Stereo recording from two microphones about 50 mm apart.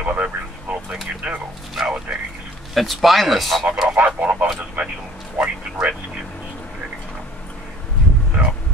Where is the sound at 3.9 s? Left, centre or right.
Right.